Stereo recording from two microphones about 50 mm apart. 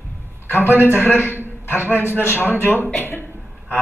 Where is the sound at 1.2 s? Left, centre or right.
Right.